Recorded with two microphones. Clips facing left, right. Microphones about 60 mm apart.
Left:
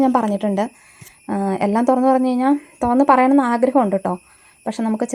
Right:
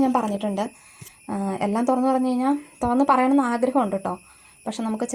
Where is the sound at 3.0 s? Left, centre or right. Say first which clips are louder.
Left 5 dB; left.